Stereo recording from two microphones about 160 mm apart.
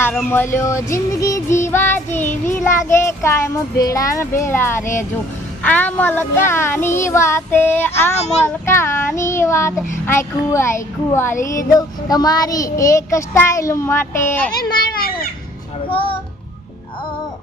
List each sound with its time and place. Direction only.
0.3 s music: 15° left (ahead or behind)
15.9 s speech: 35° left (ahead or behind)